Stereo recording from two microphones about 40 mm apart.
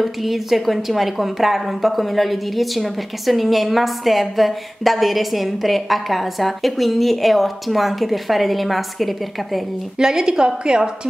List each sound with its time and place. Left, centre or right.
0.0 s a woman's voice: centre
9.9 s a woman's voice: centre